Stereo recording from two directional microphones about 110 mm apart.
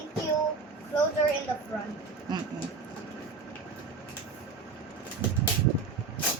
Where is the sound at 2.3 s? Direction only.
40° right (ahead or behind).